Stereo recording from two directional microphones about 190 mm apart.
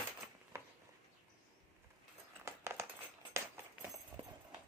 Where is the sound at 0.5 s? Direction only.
15° right (ahead or behind).